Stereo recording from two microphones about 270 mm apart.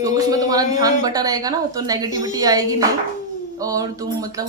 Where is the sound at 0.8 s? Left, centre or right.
Centre.